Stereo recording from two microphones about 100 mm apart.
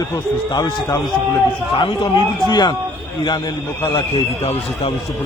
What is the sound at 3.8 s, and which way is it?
Speech, 65° left (ahead or behind).